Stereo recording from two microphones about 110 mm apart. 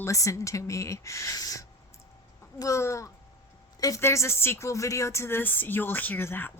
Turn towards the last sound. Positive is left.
turn(degrees=20)  # may be behind; listen again after turning